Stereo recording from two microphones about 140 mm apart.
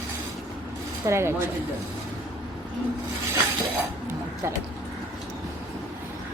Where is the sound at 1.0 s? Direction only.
20° right (ahead or behind).